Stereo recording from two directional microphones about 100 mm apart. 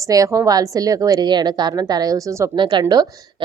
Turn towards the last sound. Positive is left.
turn(degrees=-40)  # may be behind; listen again after turning